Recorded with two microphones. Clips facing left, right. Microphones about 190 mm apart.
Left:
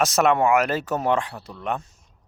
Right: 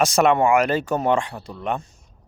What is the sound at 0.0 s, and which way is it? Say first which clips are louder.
Speech: right 2 dB; centre (ahead or behind).